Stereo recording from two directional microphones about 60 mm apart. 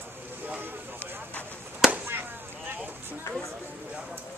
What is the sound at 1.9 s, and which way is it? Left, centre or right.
Chop, right.